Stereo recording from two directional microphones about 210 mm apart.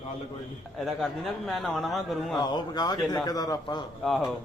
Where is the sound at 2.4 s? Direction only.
20° left (ahead or behind).